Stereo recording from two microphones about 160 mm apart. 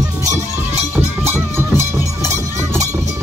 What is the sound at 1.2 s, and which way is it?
Music, 15° right (ahead or behind).